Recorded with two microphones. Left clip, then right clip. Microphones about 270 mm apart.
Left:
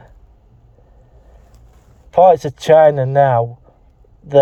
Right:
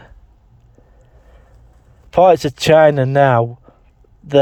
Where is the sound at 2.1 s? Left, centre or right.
Right.